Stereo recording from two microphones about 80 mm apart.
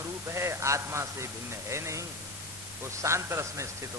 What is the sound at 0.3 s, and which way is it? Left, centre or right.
A man's voice, right.